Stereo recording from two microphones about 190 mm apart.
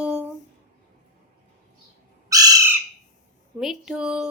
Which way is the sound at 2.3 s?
20° right (ahead or behind).